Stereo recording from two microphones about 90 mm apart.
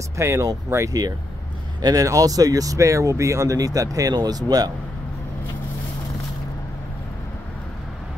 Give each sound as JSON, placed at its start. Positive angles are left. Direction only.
{"t": 0.2, "sound": "speech", "side_deg": -35}